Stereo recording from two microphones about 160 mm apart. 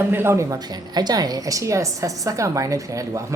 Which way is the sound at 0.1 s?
15° right (ahead or behind).